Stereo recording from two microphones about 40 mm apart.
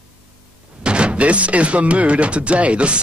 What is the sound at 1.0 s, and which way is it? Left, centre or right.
Music, right.